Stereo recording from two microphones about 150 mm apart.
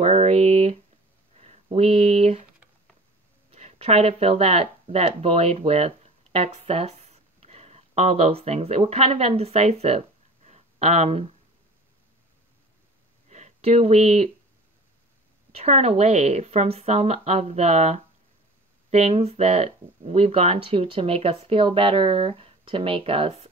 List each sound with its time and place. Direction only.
0.0 s a sound: 50° right (ahead or behind)
1.4 s speech: 45° right (ahead or behind)
3.5 s speech: 45° right (ahead or behind)
13.3 s speech: 45° right (ahead or behind)
15.5 s speech: 45° right (ahead or behind)